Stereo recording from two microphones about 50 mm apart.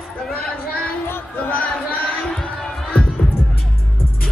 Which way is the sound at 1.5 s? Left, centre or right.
Left.